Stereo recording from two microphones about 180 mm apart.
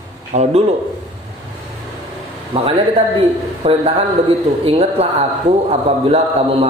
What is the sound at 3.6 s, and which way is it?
Speech, 35° right (ahead or behind).